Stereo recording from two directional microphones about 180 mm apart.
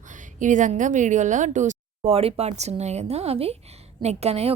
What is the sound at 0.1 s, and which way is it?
A woman's voice, 45° right (ahead or behind).